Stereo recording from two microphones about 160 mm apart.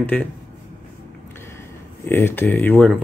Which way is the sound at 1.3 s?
15° left (ahead or behind).